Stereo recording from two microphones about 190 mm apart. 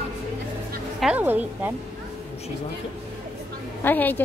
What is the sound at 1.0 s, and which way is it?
Speech, 5° right (ahead or behind).